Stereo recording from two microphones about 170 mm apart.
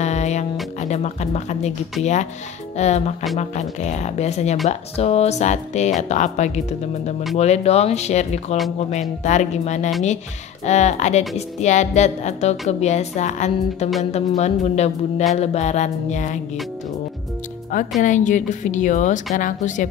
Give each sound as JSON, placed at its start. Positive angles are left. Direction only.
{"t": 0.0, "sound": "music", "side_deg": 40}
{"t": 0.7, "sound": "speech", "side_deg": 40}
{"t": 17.7, "sound": "speech", "side_deg": 50}